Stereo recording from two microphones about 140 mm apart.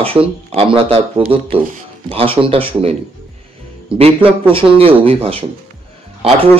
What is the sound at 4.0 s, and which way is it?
Speech, 40° right (ahead or behind).